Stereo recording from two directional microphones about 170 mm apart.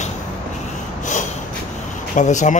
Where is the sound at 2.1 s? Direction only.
45° left (ahead or behind).